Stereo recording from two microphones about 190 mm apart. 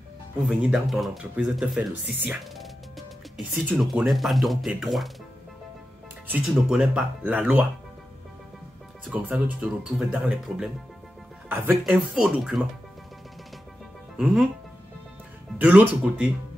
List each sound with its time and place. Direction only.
0.5 s speech: 5° right (ahead or behind)
6.3 s speech: 5° right (ahead or behind)
9.1 s speech: 10° right (ahead or behind)
14.1 s speech: 5° right (ahead or behind)
15.5 s speech: 10° right (ahead or behind)